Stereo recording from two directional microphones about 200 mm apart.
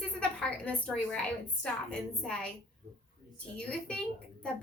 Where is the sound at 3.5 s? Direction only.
5° left (ahead or behind).